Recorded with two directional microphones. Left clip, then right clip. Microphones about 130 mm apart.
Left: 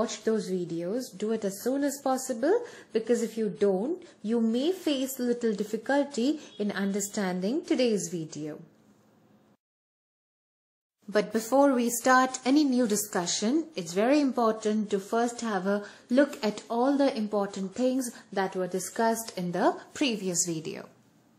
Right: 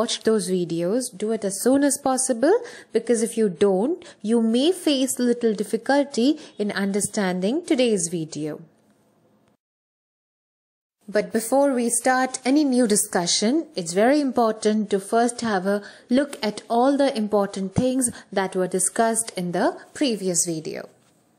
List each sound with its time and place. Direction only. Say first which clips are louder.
0.0 s speech: right 7 dB; 50° right (ahead or behind)
1.1 s speech: right 5 dB; 25° right (ahead or behind)
1.6 s speech: right 9 dB; 45° right (ahead or behind)
3.3 s speech: right 7 dB; 50° right (ahead or behind)
3.8 s speech: right 7 dB; 45° right (ahead or behind)
11.1 s speech: right 5 dB; 20° right (ahead or behind); by 14.2 s 40° right (ahead or behind)
14.3 s speech: right 6 dB; 50° right (ahead or behind)
14.8 s speech: right 7 dB; 30° right (ahead or behind)
15.6 s speech: right 5 dB; 25° right (ahead or behind)
16.7 s speech: right 7 dB; 50° right (ahead or behind); by 19.6 s 30° right (ahead or behind)
19.6 s a woman's voice: right 3 dB; 15° right (ahead or behind)
20.1 s speech: right 7 dB; 30° right (ahead or behind)